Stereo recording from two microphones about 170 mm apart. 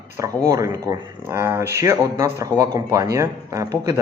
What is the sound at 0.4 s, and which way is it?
A man's voice, 20° right (ahead or behind).